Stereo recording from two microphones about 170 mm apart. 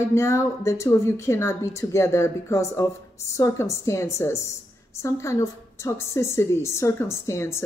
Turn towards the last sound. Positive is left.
turn(degrees=15)  # may be behind; listen again after turning